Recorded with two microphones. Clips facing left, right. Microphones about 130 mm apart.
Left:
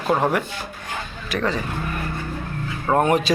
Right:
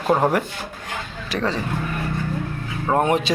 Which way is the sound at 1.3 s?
30° right (ahead or behind).